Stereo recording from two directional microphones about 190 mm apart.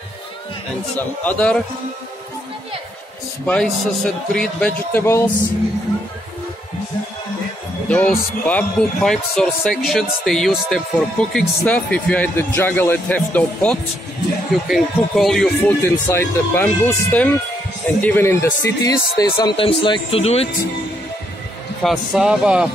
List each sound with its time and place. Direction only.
1.2 s a man's voice: 5° left (ahead or behind)
3.4 s a man's voice: centre (ahead or behind)
7.9 s a man's voice: 5° left (ahead or behind); by 20.4 s 30° left (ahead or behind)
21.8 s a man's voice: 5° right (ahead or behind)